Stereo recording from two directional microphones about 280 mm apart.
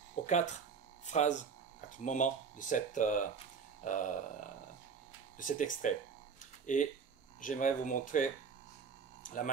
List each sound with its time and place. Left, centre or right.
0.3 s speech: left
5.4 s speech: left
9.2 s a sound: left